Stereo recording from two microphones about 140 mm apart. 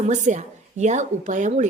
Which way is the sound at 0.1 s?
60° right (ahead or behind).